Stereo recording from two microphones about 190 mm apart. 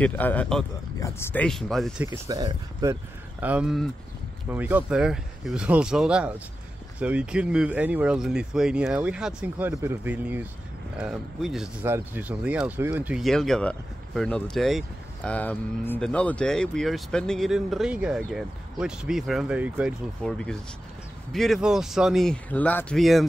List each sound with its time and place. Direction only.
0.0 s speech: 10° left (ahead or behind)
2.0 s speech: 20° right (ahead or behind); by 23.2 s centre (ahead or behind)